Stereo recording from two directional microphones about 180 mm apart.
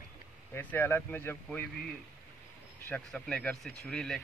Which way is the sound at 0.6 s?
10° left (ahead or behind).